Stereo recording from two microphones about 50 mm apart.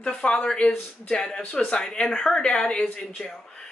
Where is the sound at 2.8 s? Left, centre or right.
Left.